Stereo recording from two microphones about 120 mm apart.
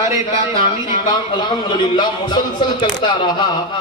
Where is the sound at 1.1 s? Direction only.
40° left (ahead or behind).